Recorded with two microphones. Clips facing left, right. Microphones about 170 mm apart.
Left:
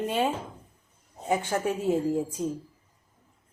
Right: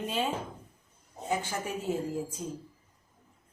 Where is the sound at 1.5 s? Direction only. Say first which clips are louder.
Left 8 dB; 55° left (ahead or behind).